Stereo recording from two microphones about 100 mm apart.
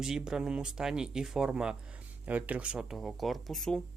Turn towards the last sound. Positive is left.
turn(degrees=5)  # may be behind; listen again after turning